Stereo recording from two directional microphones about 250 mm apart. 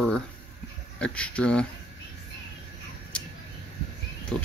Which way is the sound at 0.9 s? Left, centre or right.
Centre.